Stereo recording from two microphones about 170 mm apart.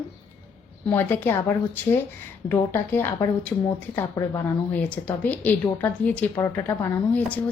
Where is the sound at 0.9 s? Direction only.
10° left (ahead or behind).